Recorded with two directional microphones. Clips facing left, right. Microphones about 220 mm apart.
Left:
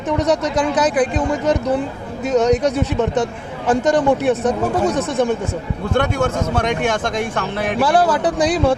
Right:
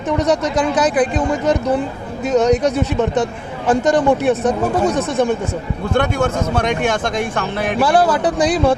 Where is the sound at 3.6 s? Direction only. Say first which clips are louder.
Right 1 dB; 25° right (ahead or behind).